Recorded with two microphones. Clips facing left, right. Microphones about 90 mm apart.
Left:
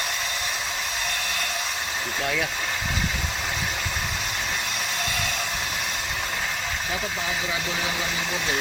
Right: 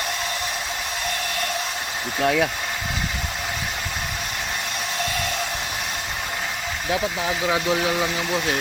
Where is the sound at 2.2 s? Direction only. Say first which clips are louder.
Right 8 dB; 60° right (ahead or behind).